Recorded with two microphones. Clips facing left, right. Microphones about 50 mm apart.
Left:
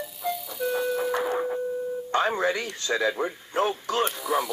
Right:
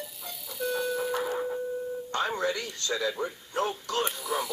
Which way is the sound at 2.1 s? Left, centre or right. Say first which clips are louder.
Left 5 dB; left.